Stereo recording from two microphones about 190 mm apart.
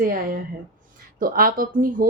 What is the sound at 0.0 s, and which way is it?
Speech, 45° right (ahead or behind).